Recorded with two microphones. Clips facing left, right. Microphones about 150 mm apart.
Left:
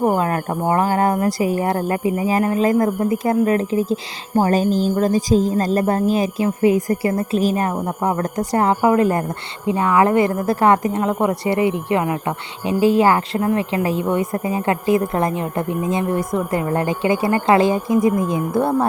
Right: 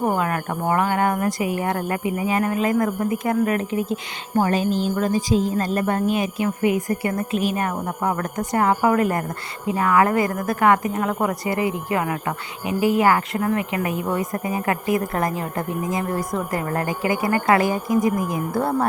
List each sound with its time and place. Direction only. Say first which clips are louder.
0.0 s a woman's voice: left 4 dB; 30° left (ahead or behind)